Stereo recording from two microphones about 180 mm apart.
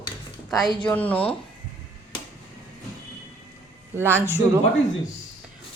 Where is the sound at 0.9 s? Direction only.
10° left (ahead or behind).